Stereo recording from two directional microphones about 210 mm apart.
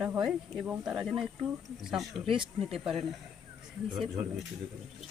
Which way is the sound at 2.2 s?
25° right (ahead or behind).